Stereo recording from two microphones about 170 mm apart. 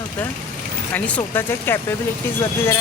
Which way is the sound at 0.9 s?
10° left (ahead or behind).